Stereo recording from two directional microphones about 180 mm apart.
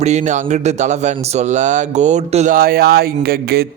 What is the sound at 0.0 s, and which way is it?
Speech, 40° right (ahead or behind).